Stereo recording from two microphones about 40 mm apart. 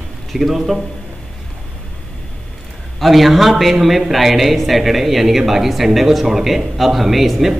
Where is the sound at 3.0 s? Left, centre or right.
Centre.